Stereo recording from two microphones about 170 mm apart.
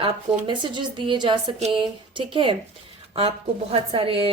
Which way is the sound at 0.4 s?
30° right (ahead or behind).